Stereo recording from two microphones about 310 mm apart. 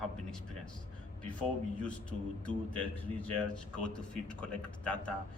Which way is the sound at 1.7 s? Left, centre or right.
Centre.